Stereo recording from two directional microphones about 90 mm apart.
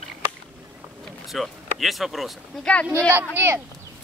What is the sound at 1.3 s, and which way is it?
Speech, centre (ahead or behind).